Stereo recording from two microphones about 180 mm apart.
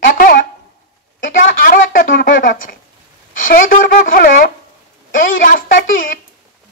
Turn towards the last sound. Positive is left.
turn(degrees=50)  # may be behind; listen again after turning